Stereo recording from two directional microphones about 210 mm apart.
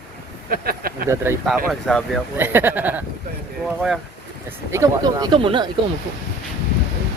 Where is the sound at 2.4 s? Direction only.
10° right (ahead or behind).